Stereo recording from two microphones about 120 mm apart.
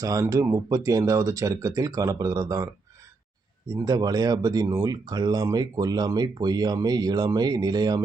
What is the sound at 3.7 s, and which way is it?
Speech, 30° right (ahead or behind).